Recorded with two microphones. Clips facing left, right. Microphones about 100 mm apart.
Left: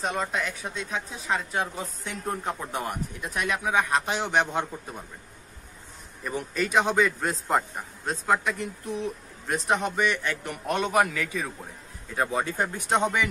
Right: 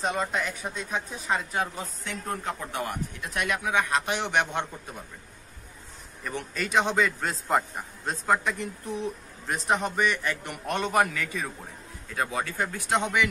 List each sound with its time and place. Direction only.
0.0 s a man's voice: centre (ahead or behind)
2.0 s a man's voice: 15° left (ahead or behind)
6.2 s a man's voice: 10° left (ahead or behind)
12.4 s a man's voice: 15° left (ahead or behind)